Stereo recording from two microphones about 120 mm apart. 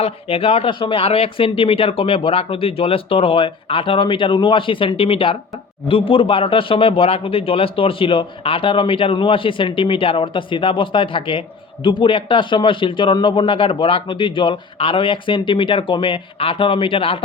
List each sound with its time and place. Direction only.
0.0 s speech: 55° left (ahead or behind)